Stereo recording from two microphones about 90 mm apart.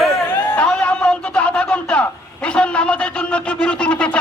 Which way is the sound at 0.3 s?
25° left (ahead or behind).